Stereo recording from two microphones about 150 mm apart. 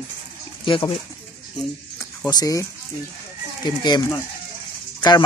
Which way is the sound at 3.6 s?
30° left (ahead or behind).